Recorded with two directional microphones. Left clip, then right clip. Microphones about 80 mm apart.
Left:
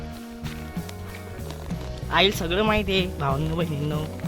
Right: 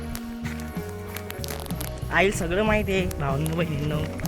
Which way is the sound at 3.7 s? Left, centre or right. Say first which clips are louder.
Even; left.